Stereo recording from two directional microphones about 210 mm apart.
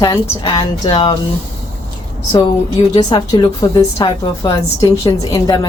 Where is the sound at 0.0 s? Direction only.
20° left (ahead or behind).